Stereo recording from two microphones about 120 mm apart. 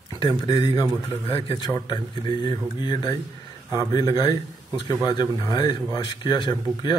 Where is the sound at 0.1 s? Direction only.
35° left (ahead or behind).